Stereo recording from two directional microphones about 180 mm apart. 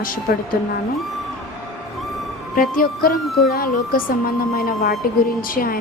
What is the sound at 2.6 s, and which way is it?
A woman's voice, 55° left (ahead or behind).